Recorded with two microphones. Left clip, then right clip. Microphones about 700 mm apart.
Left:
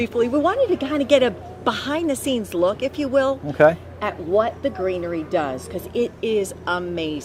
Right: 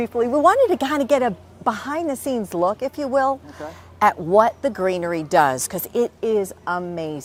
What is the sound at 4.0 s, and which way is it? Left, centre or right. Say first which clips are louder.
A woman's voice: right 8 dB; right.